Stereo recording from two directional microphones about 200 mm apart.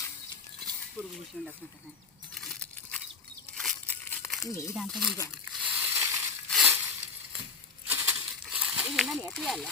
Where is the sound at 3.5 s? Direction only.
5° left (ahead or behind).